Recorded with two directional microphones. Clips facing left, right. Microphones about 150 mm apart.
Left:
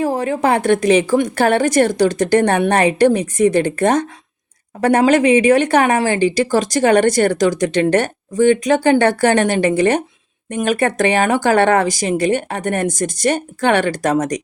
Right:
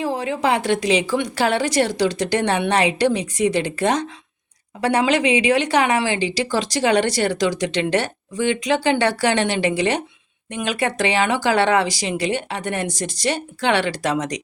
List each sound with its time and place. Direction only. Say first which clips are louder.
0.0 s speech: left 4 dB; 45° left (ahead or behind)